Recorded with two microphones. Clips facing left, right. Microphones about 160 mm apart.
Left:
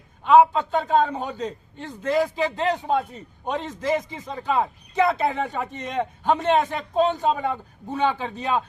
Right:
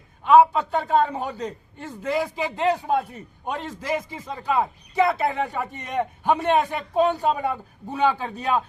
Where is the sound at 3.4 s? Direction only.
5° right (ahead or behind).